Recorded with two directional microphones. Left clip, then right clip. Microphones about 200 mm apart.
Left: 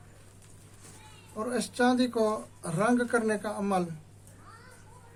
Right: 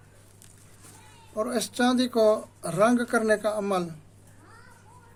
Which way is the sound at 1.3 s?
50° right (ahead or behind).